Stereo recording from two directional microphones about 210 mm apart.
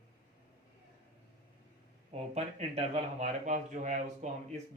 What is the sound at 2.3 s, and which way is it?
Speech, 30° right (ahead or behind).